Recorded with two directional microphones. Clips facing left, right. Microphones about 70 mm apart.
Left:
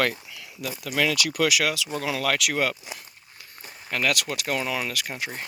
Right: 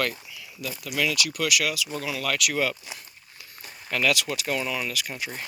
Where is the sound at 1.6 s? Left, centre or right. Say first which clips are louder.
Left 2 dB; left.